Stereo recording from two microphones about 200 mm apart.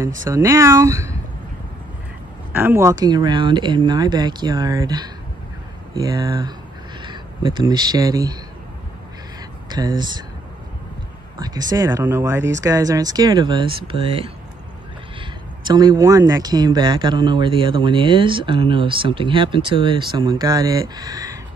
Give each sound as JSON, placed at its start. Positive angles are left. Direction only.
{"t": 0.2, "sound": "speech", "side_deg": -15}
{"t": 2.5, "sound": "speech", "side_deg": -10}
{"t": 9.7, "sound": "speech", "side_deg": -20}
{"t": 11.3, "sound": "speech", "side_deg": -20}